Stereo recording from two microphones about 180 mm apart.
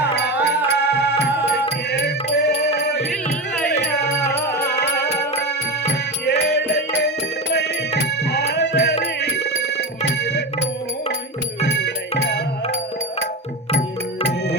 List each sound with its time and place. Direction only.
0.0 s music: 70° left (ahead or behind)
4.8 s music: 70° left (ahead or behind)
8.2 s music: 70° left (ahead or behind)
11.6 s music: 75° left (ahead or behind)